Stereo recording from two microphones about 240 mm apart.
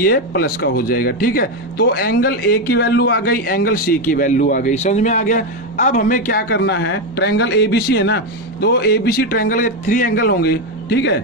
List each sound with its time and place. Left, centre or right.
0.0 s speech: left